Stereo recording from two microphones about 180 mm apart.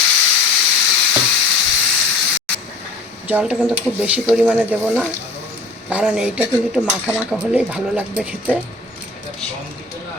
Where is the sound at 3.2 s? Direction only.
5° right (ahead or behind).